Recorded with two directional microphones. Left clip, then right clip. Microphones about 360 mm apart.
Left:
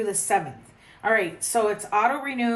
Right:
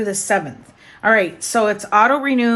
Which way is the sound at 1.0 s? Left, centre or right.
Centre.